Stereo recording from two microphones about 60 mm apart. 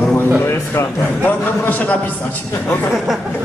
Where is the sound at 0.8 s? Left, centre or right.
Left.